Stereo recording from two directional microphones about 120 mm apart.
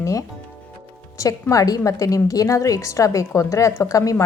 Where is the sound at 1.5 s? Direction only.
30° left (ahead or behind).